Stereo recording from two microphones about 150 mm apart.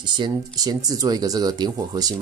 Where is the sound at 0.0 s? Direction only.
30° right (ahead or behind).